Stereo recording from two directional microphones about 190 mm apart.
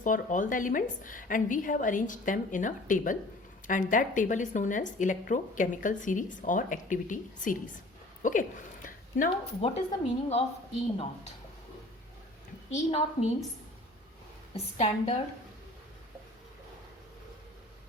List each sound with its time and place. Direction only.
0.0 s speech: 45° left (ahead or behind)
9.6 s a woman's voice: 30° left (ahead or behind)
12.7 s a woman's voice: 35° left (ahead or behind)
14.5 s a woman's voice: 35° left (ahead or behind)